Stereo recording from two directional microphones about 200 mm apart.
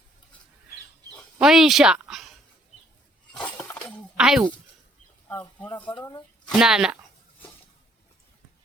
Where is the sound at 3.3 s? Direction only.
5° left (ahead or behind).